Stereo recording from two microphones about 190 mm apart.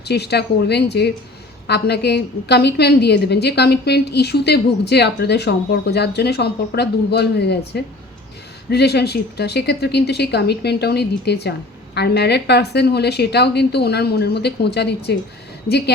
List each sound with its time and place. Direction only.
0.0 s a woman's voice: 60° left (ahead or behind)